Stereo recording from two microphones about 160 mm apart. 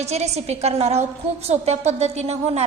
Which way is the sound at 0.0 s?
40° right (ahead or behind).